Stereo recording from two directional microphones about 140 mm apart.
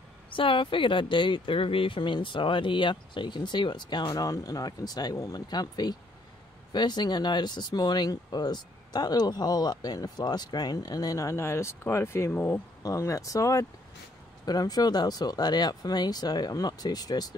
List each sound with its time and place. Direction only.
0.3 s speech: 40° left (ahead or behind)